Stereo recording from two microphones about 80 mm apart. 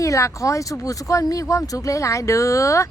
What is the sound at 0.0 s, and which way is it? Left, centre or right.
Speech, left.